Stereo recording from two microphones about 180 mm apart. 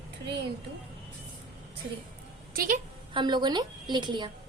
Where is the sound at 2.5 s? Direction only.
50° right (ahead or behind).